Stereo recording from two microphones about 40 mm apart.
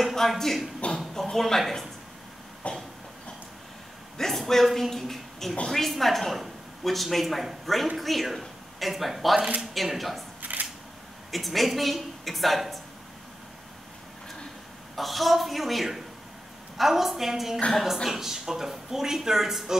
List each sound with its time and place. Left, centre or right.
0.0 s speech: centre
0.9 s a sound: centre
2.6 s train: left
4.2 s a woman's voice: centre
10.4 s a sound: right
11.3 s a woman's voice: centre
15.0 s a woman's voice: centre